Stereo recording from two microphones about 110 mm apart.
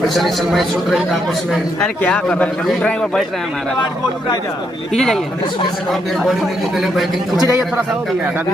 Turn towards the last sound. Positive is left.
turn(degrees=0)  # may be behind; listen again after turning